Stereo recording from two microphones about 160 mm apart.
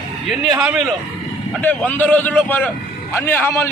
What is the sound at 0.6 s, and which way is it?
Speech, 5° right (ahead or behind).